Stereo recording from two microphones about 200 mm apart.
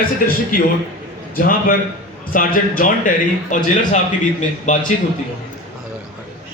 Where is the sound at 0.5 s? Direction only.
45° left (ahead or behind).